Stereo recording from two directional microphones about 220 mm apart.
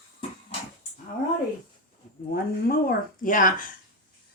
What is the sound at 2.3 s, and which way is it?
Speech, 45° left (ahead or behind).